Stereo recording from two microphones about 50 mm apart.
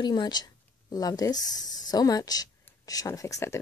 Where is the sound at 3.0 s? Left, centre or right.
Left.